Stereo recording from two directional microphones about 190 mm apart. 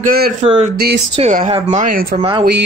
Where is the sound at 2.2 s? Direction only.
25° right (ahead or behind).